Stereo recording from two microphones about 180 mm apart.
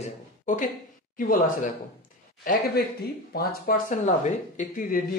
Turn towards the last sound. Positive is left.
turn(degrees=50)  # may be behind; listen again after turning